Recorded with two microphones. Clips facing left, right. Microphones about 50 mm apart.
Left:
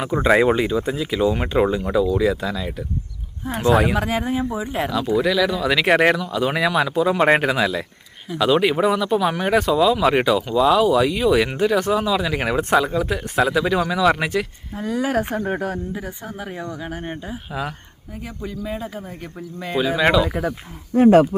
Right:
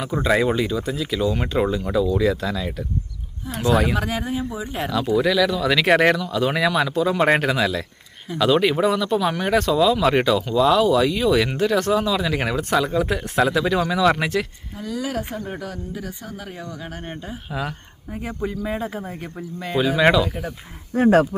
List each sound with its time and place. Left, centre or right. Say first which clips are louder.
0.0 s speech: left 3 dB; left
4.8 s speech: even; centre
14.8 s speech: left 5 dB; left
16.0 s speech: left 2 dB; centre
18.1 s speech: right 4 dB; centre
19.5 s speech: right 1 dB; centre